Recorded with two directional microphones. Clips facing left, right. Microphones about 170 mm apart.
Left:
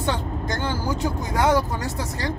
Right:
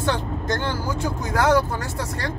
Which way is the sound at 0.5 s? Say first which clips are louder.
Even; 20° left (ahead or behind).